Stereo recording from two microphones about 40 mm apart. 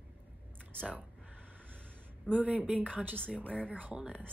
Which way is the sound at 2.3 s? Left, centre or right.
Right.